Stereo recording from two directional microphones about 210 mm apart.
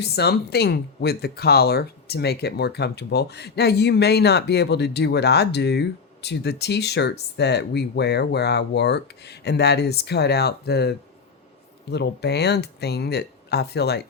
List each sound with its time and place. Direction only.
0.0 s speech: 50° left (ahead or behind)